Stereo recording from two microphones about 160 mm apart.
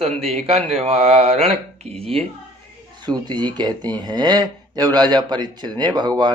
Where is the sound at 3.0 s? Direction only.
25° right (ahead or behind).